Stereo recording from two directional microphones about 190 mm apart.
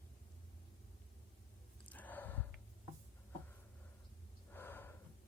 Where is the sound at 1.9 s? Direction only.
10° left (ahead or behind).